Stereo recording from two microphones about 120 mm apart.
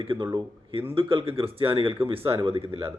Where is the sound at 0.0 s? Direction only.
45° right (ahead or behind).